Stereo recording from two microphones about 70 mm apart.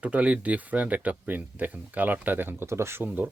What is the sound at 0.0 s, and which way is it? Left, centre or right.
Speech, centre.